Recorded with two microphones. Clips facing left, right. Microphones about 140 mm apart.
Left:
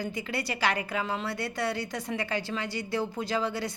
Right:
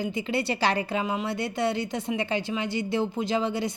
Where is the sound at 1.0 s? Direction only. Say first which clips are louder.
Right 4 dB; 15° right (ahead or behind).